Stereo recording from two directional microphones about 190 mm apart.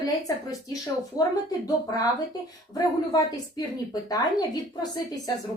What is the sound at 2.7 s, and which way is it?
Speech, 20° left (ahead or behind).